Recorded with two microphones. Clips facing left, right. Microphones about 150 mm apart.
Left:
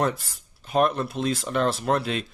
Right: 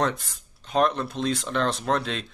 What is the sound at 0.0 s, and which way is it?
Speech, 5° left (ahead or behind).